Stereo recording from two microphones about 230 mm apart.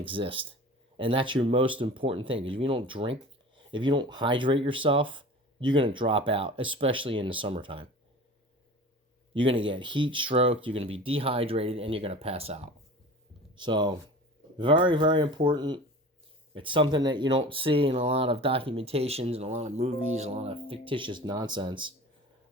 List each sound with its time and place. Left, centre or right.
0.0 s speech: right
9.3 s speech: right